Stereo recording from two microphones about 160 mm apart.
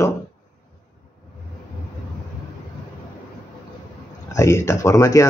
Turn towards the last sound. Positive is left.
turn(degrees=20)  # may be behind; listen again after turning